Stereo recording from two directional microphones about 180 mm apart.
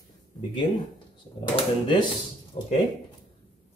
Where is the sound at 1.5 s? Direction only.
30° left (ahead or behind).